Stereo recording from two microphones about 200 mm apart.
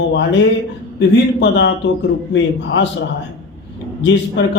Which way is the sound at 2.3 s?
65° left (ahead or behind).